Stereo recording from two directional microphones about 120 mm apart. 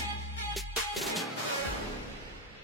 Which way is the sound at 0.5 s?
Centre (ahead or behind).